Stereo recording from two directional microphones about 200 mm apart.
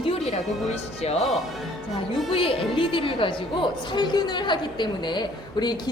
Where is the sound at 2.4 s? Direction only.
25° left (ahead or behind).